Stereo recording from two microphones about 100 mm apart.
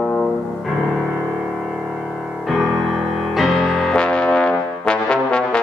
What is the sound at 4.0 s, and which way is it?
Brass instrument, 10° left (ahead or behind).